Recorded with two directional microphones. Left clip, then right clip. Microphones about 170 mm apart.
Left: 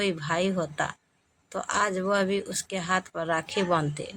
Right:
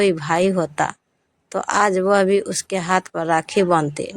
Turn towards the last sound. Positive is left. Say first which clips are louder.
# right 8 dB
turn(degrees=-45)  # may be behind; listen again after turning